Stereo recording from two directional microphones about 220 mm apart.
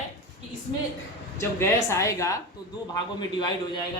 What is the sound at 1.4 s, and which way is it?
A woman's voice, 10° left (ahead or behind).